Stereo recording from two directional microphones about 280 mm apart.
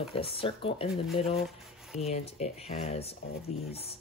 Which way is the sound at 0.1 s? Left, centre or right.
Centre.